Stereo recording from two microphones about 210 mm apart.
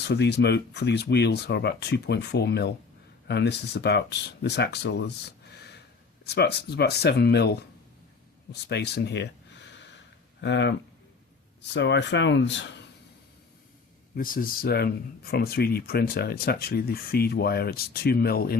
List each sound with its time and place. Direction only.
0.0 s speech: 50° left (ahead or behind)
8.6 s a sound: 50° left (ahead or behind)
10.4 s speech: 55° left (ahead or behind)
14.2 s speech: 40° left (ahead or behind)